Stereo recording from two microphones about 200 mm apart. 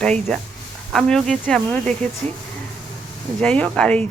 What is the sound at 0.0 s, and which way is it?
Speech, 5° left (ahead or behind).